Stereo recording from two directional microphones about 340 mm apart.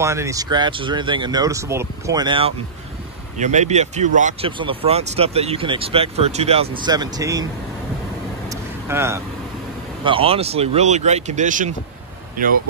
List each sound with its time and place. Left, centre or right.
0.0 s speech: centre
8.5 s vehicle: centre
10.0 s speech: centre